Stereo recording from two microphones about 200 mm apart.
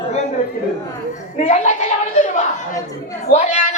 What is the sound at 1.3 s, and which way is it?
A man's voice, 35° left (ahead or behind).